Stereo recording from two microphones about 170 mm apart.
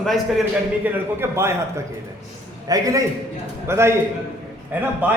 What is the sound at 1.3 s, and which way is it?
A man's voice, 15° right (ahead or behind).